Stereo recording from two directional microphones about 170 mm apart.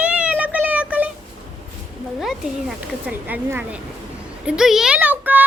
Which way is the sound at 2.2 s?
Centre (ahead or behind).